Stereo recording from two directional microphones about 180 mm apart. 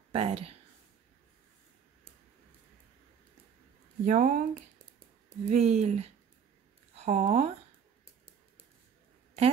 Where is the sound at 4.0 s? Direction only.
45° right (ahead or behind).